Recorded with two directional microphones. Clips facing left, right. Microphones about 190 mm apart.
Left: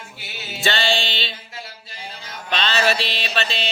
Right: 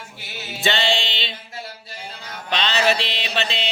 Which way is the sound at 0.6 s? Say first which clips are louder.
Even; 20° right (ahead or behind).